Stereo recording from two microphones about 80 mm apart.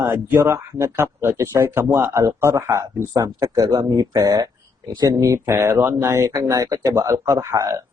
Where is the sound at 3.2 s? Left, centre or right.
Right.